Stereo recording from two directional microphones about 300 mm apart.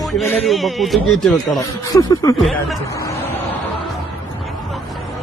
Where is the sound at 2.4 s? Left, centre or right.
Centre.